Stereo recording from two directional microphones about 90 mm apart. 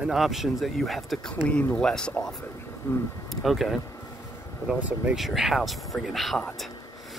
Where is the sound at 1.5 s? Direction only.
15° left (ahead or behind).